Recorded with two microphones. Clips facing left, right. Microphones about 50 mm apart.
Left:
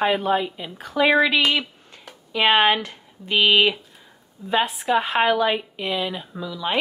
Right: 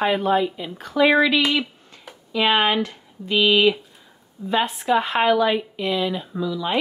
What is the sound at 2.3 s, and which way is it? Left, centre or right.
Speech, left.